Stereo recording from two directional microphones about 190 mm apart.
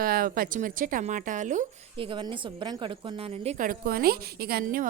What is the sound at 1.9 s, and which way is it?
Speech, 25° right (ahead or behind).